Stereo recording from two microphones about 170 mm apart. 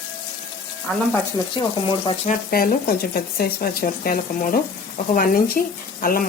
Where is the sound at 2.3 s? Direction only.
55° left (ahead or behind).